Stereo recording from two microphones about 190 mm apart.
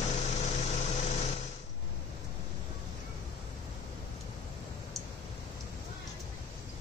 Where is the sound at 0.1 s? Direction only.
35° left (ahead or behind).